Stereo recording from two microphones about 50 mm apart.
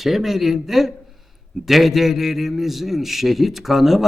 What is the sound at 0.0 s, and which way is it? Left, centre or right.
A man's voice, centre.